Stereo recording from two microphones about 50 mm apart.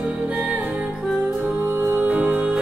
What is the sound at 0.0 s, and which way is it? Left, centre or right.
Music, right.